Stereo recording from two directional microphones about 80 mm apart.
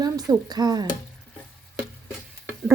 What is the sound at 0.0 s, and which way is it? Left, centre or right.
Speech, right.